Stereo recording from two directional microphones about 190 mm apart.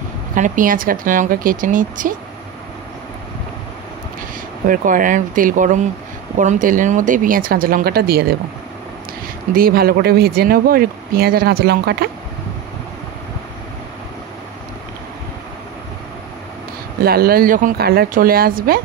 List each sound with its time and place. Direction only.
0.3 s speech: 45° right (ahead or behind)
4.6 s speech: 45° right (ahead or behind)
9.6 s speech: 50° right (ahead or behind)
17.0 s speech: 55° right (ahead or behind)